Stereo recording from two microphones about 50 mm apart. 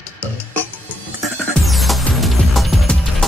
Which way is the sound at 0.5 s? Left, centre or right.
Left.